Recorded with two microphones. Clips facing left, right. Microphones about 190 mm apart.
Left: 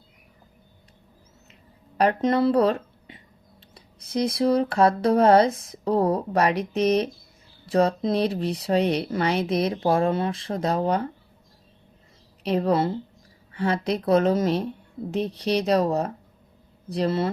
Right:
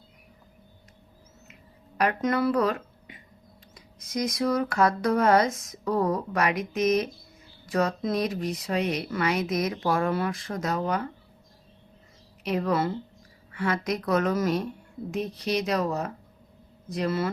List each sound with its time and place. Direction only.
2.0 s speech: 30° left (ahead or behind)
12.4 s a woman's voice: 30° left (ahead or behind)